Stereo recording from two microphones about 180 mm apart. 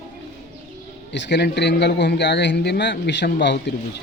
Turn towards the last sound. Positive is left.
turn(degrees=75)  # may be behind; listen again after turning